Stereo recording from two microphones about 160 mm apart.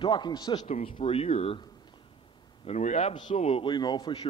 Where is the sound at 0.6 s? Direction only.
40° left (ahead or behind).